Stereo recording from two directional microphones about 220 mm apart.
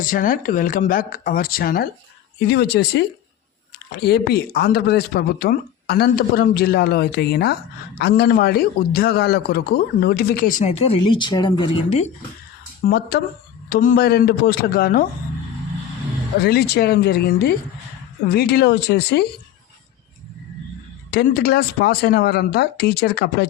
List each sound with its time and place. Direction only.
0.0 s a man's voice: 40° left (ahead or behind)
4.0 s a man's voice: 45° left (ahead or behind); by 12.0 s 25° left (ahead or behind)
12.8 s a man's voice: 45° left (ahead or behind)
16.4 s a man's voice: 45° left (ahead or behind)
21.1 s a man's voice: 45° left (ahead or behind)